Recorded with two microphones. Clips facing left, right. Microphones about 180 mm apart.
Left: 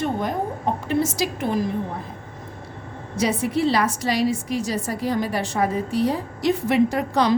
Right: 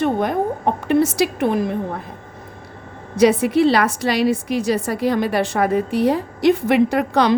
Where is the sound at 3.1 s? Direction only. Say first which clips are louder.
Right 8 dB; 65° right (ahead or behind).